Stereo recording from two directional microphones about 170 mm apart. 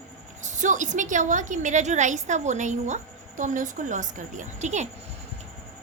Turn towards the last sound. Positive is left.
turn(degrees=-45)  # may be behind; listen again after turning